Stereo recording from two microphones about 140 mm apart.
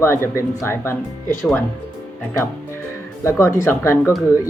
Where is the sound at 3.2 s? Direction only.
20° left (ahead or behind).